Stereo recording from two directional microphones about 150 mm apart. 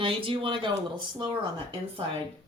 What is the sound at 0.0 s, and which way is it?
Speech, 35° right (ahead or behind).